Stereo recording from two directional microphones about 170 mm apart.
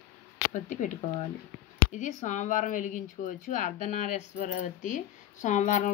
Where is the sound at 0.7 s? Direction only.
50° left (ahead or behind).